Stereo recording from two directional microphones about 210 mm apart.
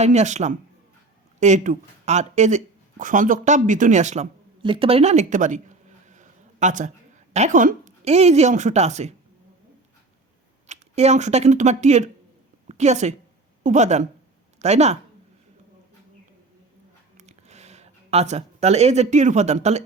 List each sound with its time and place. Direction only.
0.0 s a woman's voice: 35° right (ahead or behind)
10.7 s a woman's voice: 30° right (ahead or behind)
17.2 s a sound: 30° right (ahead or behind)